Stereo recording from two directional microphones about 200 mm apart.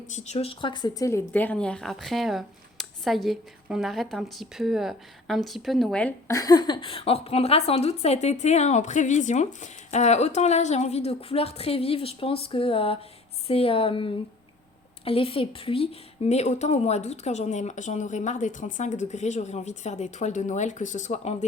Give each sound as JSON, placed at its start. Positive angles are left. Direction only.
{"t": 0.1, "sound": "a woman's voice", "side_deg": 35}